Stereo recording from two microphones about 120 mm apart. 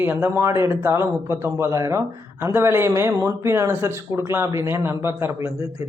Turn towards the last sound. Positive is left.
turn(degrees=-20)  # may be behind; listen again after turning